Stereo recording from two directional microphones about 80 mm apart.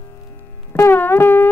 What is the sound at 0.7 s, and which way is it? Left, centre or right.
Music, left.